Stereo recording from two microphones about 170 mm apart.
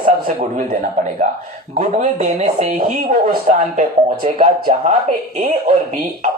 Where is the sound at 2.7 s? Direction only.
60° right (ahead or behind).